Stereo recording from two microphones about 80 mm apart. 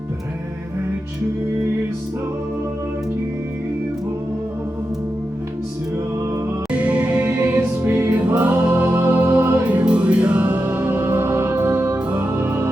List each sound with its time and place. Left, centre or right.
6.7 s music: centre
7.3 s music: right